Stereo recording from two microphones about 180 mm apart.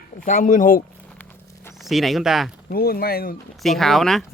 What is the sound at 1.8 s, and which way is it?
Speech, centre (ahead or behind).